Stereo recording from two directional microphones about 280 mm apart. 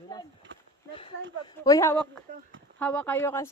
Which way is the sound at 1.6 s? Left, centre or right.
Centre.